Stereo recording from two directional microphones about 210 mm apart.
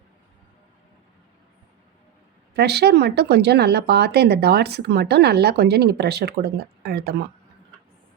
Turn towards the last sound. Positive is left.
turn(degrees=-50)  # may be behind; listen again after turning